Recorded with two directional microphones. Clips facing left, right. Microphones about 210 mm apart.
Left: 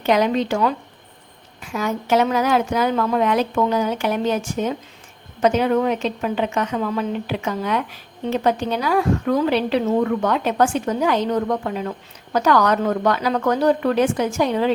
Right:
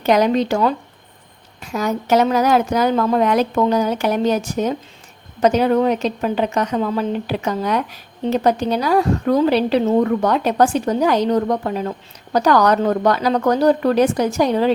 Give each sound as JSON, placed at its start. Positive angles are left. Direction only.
{"t": 0.0, "sound": "a woman's voice", "side_deg": -40}